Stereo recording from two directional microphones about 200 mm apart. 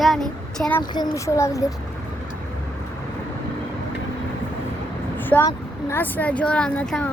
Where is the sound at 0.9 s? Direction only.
15° left (ahead or behind).